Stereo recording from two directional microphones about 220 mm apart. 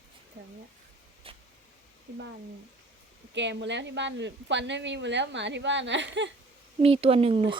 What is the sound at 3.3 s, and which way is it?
A woman's voice, 55° right (ahead or behind).